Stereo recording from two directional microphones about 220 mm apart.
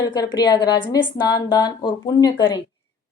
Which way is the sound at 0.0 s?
20° left (ahead or behind).